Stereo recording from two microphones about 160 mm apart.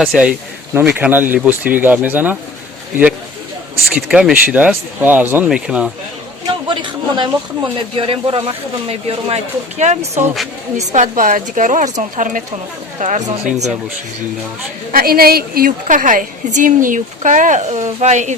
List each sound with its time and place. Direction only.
0.0 s speech: 5° right (ahead or behind)
3.8 s speech: 5° right (ahead or behind)
6.7 s a woman's voice: 30° right (ahead or behind); by 13.7 s 45° right (ahead or behind)
14.9 s a woman's voice: 70° right (ahead or behind); by 18.3 s 45° right (ahead or behind)